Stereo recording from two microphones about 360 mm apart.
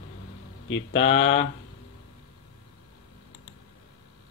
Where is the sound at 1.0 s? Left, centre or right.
Left.